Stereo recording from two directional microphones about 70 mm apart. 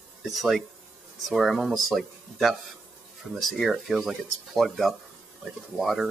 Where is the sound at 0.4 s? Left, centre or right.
Centre.